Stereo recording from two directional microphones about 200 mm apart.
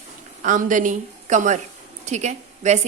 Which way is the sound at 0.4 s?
40° right (ahead or behind).